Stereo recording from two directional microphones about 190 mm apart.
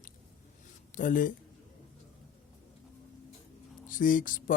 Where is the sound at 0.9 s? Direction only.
45° left (ahead or behind).